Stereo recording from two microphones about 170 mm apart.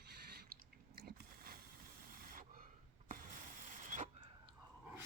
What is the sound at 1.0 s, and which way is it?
Biting, 65° right (ahead or behind).